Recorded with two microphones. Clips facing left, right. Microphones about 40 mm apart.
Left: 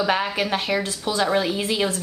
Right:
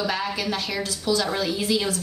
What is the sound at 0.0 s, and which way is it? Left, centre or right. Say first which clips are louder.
A woman's voice: left 4 dB; left.